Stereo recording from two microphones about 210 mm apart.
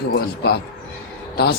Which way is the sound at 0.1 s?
50° left (ahead or behind).